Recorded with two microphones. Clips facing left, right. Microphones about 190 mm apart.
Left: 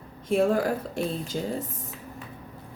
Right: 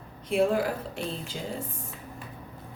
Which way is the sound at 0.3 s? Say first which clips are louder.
Left 2 dB; 45° left (ahead or behind).